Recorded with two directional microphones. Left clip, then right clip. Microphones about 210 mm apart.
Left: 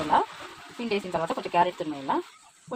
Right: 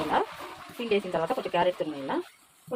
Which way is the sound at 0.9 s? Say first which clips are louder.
Right 1 dB; 35° left (ahead or behind).